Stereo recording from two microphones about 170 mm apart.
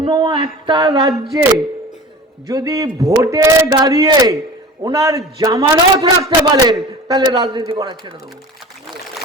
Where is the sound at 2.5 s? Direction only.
20° right (ahead or behind).